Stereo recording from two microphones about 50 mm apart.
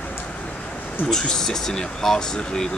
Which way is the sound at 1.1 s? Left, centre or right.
Centre.